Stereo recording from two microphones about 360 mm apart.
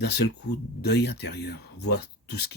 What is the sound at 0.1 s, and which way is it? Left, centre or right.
Speech, left.